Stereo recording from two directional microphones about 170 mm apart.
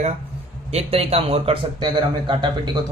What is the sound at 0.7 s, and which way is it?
A man's voice, 35° right (ahead or behind).